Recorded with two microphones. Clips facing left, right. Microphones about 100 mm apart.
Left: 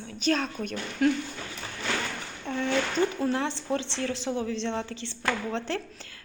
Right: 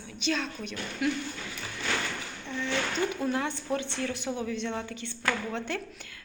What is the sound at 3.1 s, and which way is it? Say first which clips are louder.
A woman's voice: left 2 dB; 30° left (ahead or behind).